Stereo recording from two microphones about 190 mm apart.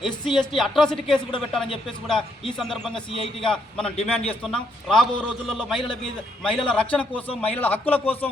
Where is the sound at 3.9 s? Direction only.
30° left (ahead or behind).